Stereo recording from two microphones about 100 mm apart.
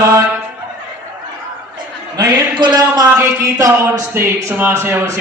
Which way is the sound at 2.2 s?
45° right (ahead or behind).